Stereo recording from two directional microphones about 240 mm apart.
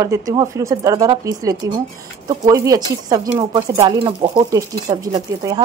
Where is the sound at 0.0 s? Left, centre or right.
Centre.